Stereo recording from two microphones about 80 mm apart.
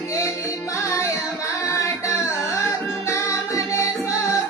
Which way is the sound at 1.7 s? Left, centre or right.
Left.